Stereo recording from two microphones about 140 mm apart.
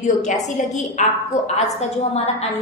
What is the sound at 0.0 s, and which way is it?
A woman's voice, 60° left (ahead or behind).